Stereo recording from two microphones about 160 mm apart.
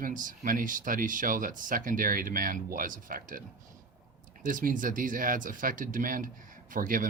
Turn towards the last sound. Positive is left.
turn(degrees=-55)  # may be behind; listen again after turning